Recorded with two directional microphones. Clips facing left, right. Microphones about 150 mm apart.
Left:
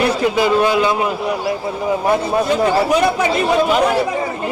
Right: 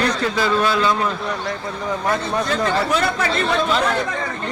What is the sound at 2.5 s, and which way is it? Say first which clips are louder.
Speech: left 5 dB; 10° left (ahead or behind).